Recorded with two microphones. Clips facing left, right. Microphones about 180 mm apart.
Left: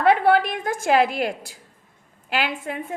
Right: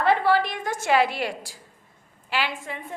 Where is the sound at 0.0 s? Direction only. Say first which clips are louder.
Left 3 dB; 60° left (ahead or behind).